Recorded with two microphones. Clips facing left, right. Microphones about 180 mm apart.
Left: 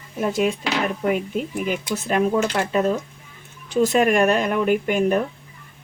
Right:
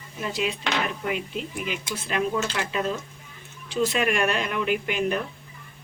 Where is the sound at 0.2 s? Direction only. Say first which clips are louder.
Left 7 dB; 50° left (ahead or behind).